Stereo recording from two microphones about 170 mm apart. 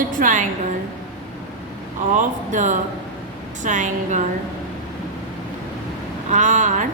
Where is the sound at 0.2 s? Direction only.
50° right (ahead or behind).